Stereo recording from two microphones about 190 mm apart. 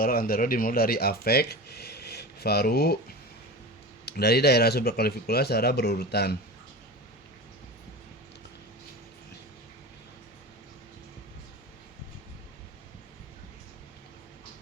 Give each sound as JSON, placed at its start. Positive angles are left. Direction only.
{"t": 0.0, "sound": "speech", "side_deg": 50}